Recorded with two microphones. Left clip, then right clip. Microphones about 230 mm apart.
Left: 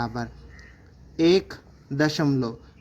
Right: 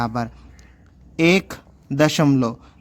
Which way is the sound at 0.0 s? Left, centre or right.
Right.